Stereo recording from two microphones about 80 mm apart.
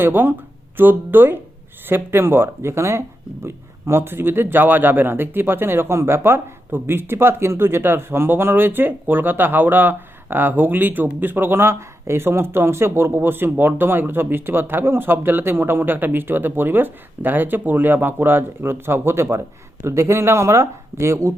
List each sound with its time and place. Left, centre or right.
0.0 s speech: right